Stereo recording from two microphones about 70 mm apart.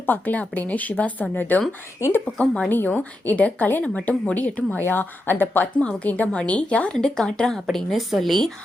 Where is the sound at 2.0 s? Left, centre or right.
Left.